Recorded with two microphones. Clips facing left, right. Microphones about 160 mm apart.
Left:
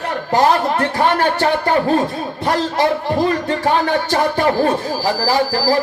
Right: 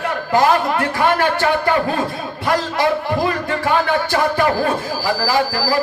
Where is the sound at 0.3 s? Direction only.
40° left (ahead or behind).